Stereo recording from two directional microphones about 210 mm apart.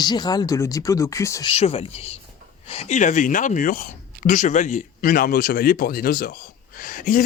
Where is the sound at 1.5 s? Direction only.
30° left (ahead or behind).